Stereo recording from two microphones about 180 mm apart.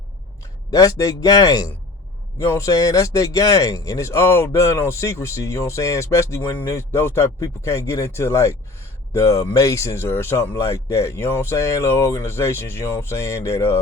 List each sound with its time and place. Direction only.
0.7 s a man's voice: 20° left (ahead or behind)